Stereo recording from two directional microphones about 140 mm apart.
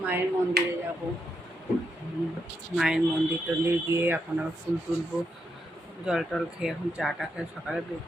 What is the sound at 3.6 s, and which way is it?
Speech, 15° right (ahead or behind).